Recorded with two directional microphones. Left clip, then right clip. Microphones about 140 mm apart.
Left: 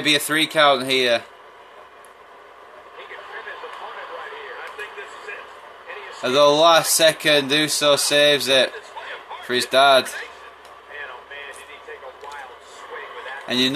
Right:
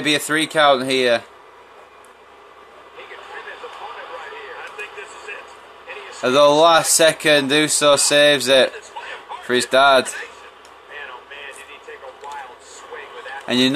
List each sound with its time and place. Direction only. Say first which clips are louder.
0.0 s speech: even; 35° right (ahead or behind)
6.2 s speech: right 2 dB; 45° right (ahead or behind)
13.5 s speech: right 3 dB; 50° right (ahead or behind)